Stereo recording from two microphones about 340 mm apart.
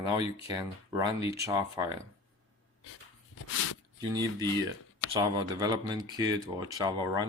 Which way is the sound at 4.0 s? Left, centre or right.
Centre.